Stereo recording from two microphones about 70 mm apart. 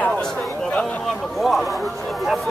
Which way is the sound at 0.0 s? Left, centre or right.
Centre.